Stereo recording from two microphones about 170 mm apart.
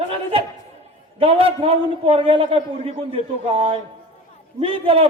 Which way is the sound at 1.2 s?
35° right (ahead or behind).